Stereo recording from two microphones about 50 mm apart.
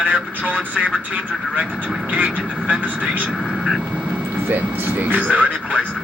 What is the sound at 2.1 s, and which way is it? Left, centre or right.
Speech, right.